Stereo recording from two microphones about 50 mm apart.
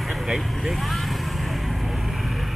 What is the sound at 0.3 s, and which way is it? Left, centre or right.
Speech, centre.